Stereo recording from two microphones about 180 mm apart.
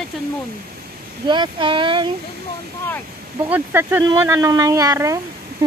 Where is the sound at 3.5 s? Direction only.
10° right (ahead or behind).